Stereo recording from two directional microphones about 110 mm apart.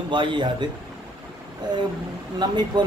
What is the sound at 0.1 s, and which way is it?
Speech, 45° right (ahead or behind).